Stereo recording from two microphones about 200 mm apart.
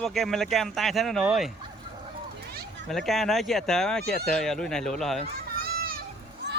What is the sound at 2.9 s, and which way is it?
Speech, centre (ahead or behind).